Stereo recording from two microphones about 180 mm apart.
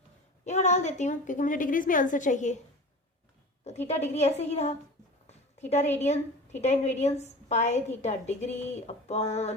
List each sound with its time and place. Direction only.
0.4 s a woman's voice: 40° left (ahead or behind)
3.8 s a woman's voice: 40° left (ahead or behind)